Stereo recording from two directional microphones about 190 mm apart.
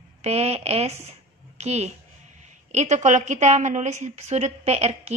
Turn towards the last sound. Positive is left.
turn(degrees=-35)  # may be behind; listen again after turning